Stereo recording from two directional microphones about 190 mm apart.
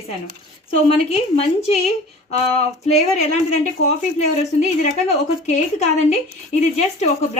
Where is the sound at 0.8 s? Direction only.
30° left (ahead or behind).